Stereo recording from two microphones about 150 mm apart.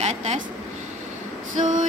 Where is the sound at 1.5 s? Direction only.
60° right (ahead or behind).